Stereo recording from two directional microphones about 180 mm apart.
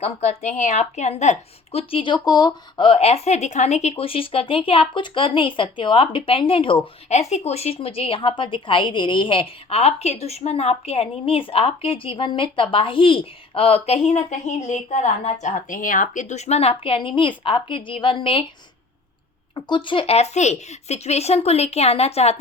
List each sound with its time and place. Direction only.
0.0 s a woman's voice: 35° left (ahead or behind)
19.5 s a woman's voice: 25° left (ahead or behind)